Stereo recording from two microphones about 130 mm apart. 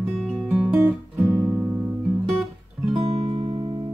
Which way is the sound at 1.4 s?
15° right (ahead or behind).